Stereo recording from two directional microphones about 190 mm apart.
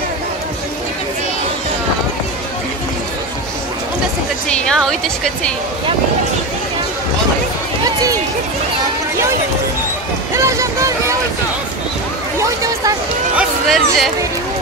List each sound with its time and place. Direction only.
4.5 s music: 5° left (ahead or behind)
10.3 s speech: 15° right (ahead or behind)
12.4 s a sound: 15° right (ahead or behind)
13.4 s music: centre (ahead or behind)